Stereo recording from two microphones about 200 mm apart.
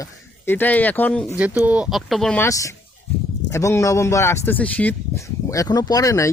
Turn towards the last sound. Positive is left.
turn(degrees=15)  # may be behind; listen again after turning